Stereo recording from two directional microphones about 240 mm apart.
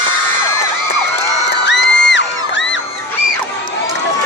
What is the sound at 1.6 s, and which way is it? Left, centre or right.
Music, left.